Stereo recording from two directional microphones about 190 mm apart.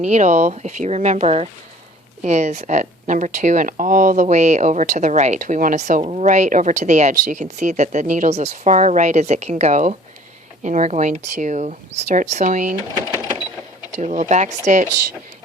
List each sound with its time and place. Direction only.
0.0 s speech: 40° right (ahead or behind)
13.9 s speech: 40° right (ahead or behind)